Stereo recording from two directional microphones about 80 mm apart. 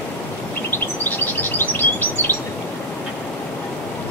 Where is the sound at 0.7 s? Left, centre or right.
Left.